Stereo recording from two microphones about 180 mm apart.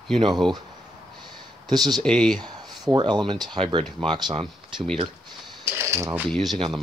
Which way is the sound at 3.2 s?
25° right (ahead or behind).